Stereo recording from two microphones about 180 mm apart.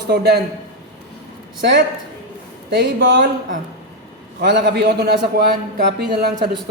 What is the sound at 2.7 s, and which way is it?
Speech, 65° right (ahead or behind).